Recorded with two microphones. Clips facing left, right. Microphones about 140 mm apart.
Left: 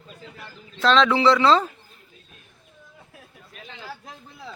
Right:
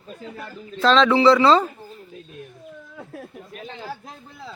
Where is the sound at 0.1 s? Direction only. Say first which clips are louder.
Right 7 dB; 40° right (ahead or behind).